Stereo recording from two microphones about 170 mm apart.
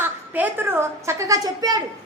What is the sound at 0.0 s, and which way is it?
A woman's voice, 10° right (ahead or behind).